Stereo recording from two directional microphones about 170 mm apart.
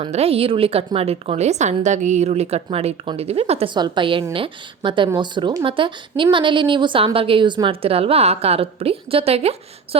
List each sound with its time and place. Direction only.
0.0 s a woman's voice: 35° right (ahead or behind)
3.8 s a woman's voice: 25° right (ahead or behind)